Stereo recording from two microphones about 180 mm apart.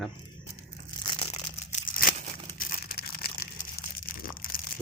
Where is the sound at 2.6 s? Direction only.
55° left (ahead or behind).